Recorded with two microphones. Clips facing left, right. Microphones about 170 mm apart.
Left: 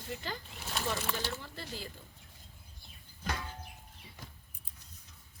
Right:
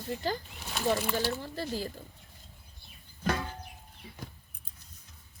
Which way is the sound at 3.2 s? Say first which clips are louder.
Right 8 dB; 55° right (ahead or behind).